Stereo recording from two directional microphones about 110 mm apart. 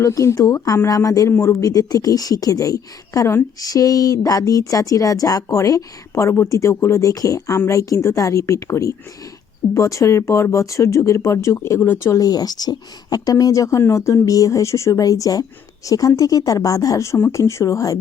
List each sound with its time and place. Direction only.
0.0 s speech: 30° left (ahead or behind)
12.1 s speech: 35° left (ahead or behind)